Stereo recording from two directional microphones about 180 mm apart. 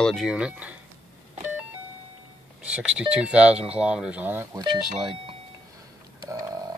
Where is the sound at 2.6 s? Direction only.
5° right (ahead or behind).